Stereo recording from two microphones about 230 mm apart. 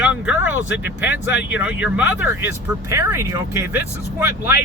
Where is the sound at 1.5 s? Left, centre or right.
Centre.